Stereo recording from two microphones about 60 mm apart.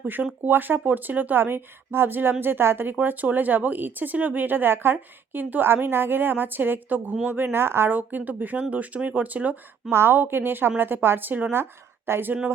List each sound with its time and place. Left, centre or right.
0.0 s speech: right
9.9 s a woman's voice: right